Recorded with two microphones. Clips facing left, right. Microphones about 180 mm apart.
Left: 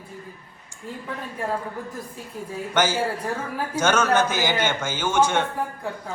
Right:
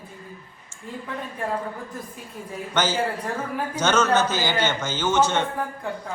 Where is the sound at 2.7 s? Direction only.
10° left (ahead or behind).